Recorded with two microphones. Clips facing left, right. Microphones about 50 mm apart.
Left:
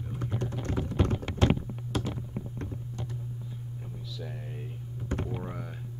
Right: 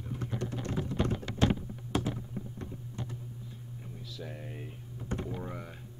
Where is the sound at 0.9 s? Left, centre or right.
Left.